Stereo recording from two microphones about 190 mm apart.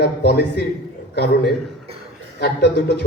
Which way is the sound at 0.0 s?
55° left (ahead or behind).